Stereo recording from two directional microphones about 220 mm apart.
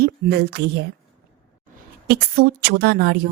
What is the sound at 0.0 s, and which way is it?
Speech, 45° right (ahead or behind).